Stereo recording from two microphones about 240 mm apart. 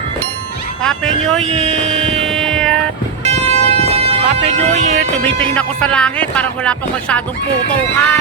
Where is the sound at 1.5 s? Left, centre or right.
Right.